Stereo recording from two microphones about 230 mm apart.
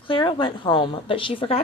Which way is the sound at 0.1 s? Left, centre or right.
Left.